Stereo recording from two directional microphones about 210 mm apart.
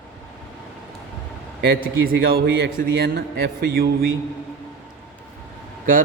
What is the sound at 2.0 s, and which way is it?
A man's voice, 45° right (ahead or behind).